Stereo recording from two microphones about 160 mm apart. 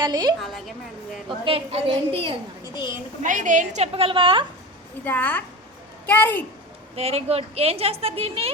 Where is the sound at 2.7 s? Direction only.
25° left (ahead or behind).